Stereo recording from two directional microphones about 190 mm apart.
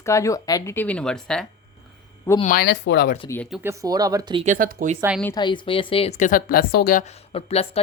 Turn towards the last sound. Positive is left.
turn(degrees=30)  # may be behind; listen again after turning